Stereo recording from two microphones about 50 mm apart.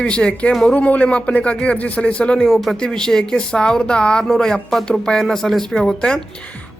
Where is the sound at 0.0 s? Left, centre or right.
Centre.